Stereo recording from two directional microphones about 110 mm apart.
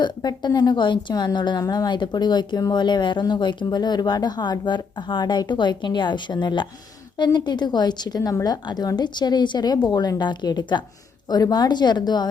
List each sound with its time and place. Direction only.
0.0 s a woman's voice: 40° left (ahead or behind)